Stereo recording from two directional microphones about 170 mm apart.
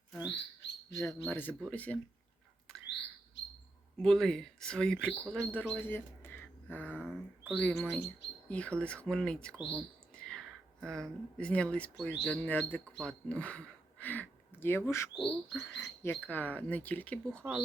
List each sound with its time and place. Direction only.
0.1 s bird: centre (ahead or behind)
0.9 s speech: 20° left (ahead or behind)
3.9 s speech: 5° left (ahead or behind)
7.0 s speech: 5° right (ahead or behind)
7.5 s speech: 5° left (ahead or behind)
15.2 s speech: centre (ahead or behind)